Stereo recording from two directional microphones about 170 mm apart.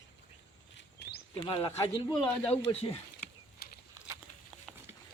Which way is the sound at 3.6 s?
65° left (ahead or behind).